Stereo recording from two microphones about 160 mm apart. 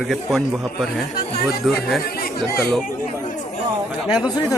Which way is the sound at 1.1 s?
80° left.